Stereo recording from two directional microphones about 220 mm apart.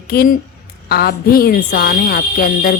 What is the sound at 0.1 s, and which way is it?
A woman's voice, 45° left (ahead or behind).